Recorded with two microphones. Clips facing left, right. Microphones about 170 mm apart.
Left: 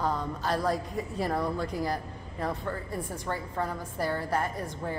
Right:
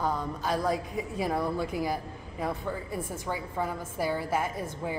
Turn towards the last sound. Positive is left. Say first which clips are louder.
# even
turn(degrees=-5)  # may be behind; listen again after turning